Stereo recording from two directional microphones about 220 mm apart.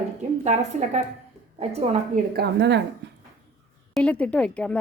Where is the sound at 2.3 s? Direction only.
50° right (ahead or behind).